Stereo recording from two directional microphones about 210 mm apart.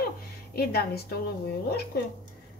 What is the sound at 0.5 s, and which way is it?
Speech, 50° left (ahead or behind).